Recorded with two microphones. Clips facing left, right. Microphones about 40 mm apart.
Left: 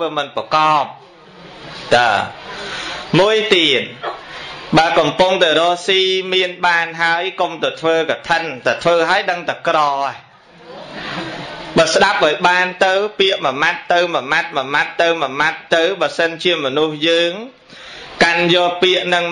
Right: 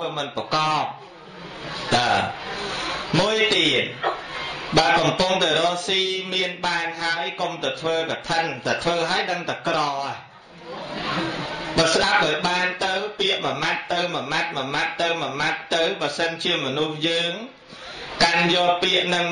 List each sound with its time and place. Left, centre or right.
0.0 s a man's voice: left
1.9 s a man's voice: left
11.0 s a sound: left
11.7 s a man's voice: left
18.1 s a sound: left
18.5 s a man's voice: left